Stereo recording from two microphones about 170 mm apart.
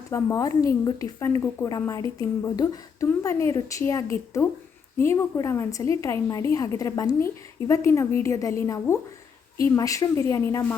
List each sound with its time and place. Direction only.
0.1 s a woman's voice: 15° left (ahead or behind)